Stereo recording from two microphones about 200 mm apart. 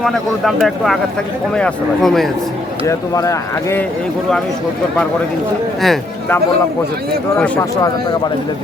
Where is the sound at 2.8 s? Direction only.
15° left (ahead or behind).